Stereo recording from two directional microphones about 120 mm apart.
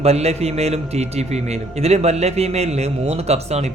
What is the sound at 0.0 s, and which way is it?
A man's voice, 60° right (ahead or behind).